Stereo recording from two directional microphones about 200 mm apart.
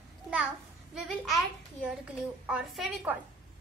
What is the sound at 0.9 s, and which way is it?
A woman's voice, centre (ahead or behind).